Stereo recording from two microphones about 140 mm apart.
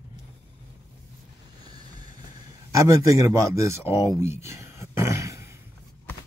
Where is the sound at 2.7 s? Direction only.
20° right (ahead or behind).